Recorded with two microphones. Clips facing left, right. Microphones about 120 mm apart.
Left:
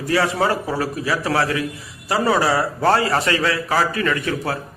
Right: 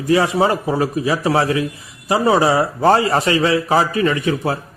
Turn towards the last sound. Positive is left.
turn(degrees=-20)  # may be behind; listen again after turning